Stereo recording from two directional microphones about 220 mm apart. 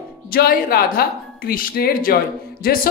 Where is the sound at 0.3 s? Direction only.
45° left (ahead or behind).